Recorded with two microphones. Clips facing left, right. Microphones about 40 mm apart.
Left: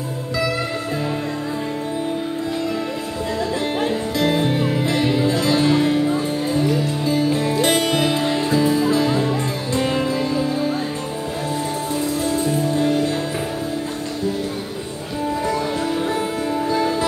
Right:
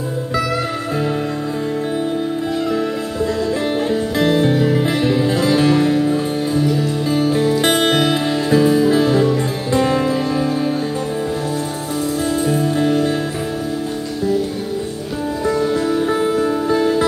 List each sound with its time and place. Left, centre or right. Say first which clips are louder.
4.3 s music: right 6 dB; left
4.8 s music: right 2 dB; right
7.1 s music: right 3 dB; right
12.3 s music: right 3 dB; right
12.7 s music: right 2 dB; right
16.1 s music: right 5 dB; right